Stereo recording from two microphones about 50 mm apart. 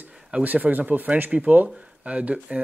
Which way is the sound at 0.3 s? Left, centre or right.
Right.